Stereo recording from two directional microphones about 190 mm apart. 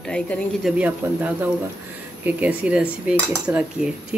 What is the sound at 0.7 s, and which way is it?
A woman's voice, 10° right (ahead or behind).